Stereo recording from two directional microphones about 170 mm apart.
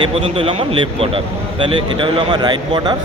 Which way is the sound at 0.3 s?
30° right (ahead or behind).